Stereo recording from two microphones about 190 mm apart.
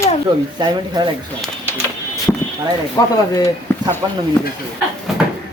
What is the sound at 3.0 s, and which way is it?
Speech, 20° left (ahead or behind).